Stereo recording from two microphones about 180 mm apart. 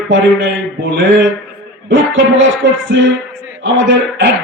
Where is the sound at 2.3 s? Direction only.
90° right.